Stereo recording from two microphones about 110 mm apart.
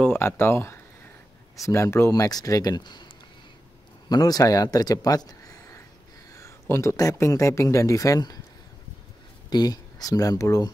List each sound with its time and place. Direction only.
0.0 s speech: 20° left (ahead or behind); by 3.1 s 40° left (ahead or behind)
4.1 s speech: 35° left (ahead or behind)
9.5 s speech: 35° left (ahead or behind)